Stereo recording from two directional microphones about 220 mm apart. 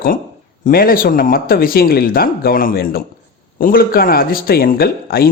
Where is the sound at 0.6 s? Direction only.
40° left (ahead or behind).